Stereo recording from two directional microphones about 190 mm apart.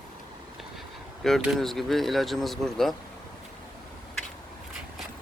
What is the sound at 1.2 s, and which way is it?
Speech, centre (ahead or behind).